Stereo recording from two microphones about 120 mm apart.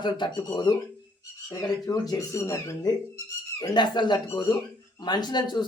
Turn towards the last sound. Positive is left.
turn(degrees=35)  # may be behind; listen again after turning